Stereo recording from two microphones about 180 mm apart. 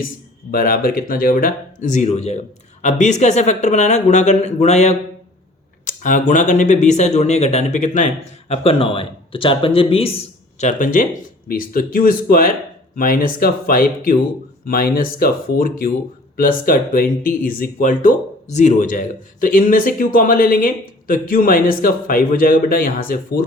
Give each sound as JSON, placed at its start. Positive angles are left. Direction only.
{"t": 0.5, "sound": "speech", "side_deg": 50}
{"t": 10.6, "sound": "speech", "side_deg": 45}